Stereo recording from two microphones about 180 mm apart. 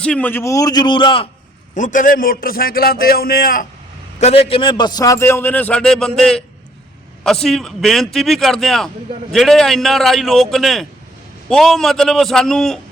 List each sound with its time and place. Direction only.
0.0 s a man's voice: 10° left (ahead or behind); by 1.3 s 30° left (ahead or behind)
1.7 s a man's voice: 45° left (ahead or behind)
4.2 s a man's voice: 35° left (ahead or behind); by 12.8 s 5° left (ahead or behind)